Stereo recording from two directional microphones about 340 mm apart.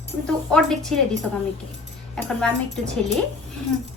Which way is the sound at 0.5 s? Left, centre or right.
Centre.